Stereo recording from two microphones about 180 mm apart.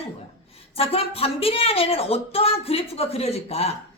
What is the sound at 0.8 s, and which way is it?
A woman's voice, 30° left (ahead or behind).